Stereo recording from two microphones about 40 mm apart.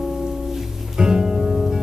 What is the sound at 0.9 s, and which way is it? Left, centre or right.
Music, centre.